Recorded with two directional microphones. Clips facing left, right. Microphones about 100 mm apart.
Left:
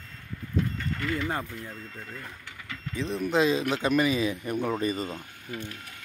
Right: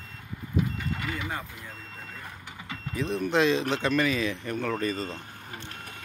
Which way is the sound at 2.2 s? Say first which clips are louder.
Even; 25° right (ahead or behind).